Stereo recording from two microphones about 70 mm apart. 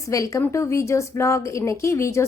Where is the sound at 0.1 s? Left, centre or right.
Left.